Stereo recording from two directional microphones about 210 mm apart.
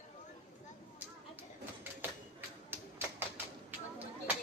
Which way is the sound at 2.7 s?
10° right (ahead or behind).